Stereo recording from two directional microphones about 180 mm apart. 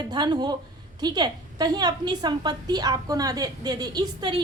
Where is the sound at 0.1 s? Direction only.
25° right (ahead or behind).